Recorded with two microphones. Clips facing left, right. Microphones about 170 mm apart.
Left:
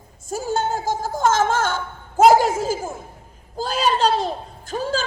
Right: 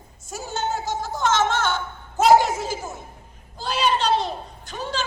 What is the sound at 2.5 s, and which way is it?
A man's voice, 30° left (ahead or behind).